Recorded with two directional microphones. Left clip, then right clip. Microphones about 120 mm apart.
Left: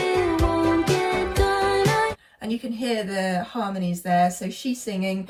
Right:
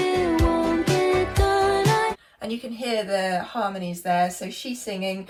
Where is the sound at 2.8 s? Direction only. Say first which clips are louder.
Right 3 dB; 45° left (ahead or behind).